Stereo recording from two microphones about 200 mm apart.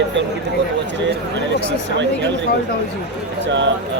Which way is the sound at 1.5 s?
65° right (ahead or behind).